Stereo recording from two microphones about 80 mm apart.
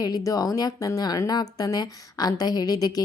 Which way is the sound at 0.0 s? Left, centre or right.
Left.